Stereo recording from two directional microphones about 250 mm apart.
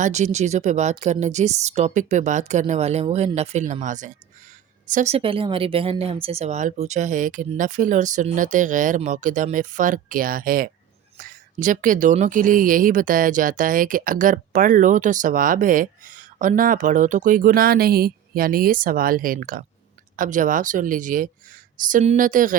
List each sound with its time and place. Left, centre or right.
0.0 s speech: right